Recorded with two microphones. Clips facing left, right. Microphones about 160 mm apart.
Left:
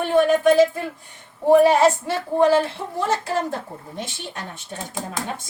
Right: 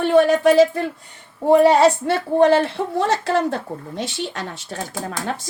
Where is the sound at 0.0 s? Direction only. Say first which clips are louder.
Right 2 dB; 80° right.